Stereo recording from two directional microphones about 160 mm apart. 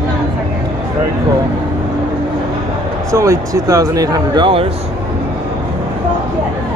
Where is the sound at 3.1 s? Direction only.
20° right (ahead or behind).